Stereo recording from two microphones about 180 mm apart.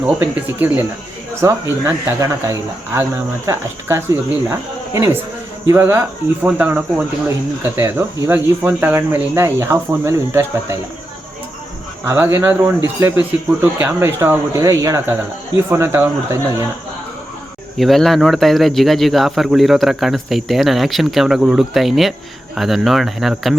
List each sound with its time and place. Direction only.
0.0 s speech: 10° right (ahead or behind)
5.6 s speech: 15° right (ahead or behind)
12.0 s speech: 15° right (ahead or behind)
17.7 s speech: centre (ahead or behind)